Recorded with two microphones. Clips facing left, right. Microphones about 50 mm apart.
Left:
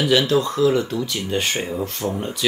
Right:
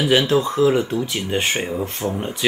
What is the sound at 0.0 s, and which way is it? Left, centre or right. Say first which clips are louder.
Speech: right 1 dB; right.